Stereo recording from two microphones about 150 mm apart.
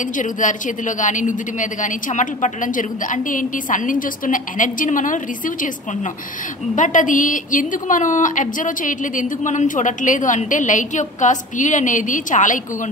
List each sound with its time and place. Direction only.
0.2 s a woman's voice: 60° left (ahead or behind)
6.7 s a woman's voice: 55° left (ahead or behind)